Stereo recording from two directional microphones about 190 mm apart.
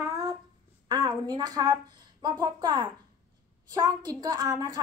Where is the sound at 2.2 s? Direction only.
20° right (ahead or behind).